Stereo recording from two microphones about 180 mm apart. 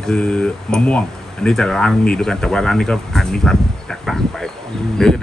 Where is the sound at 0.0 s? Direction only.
5° left (ahead or behind).